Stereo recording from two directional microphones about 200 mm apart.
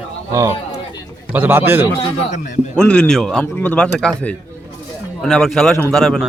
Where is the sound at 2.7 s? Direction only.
5° left (ahead or behind).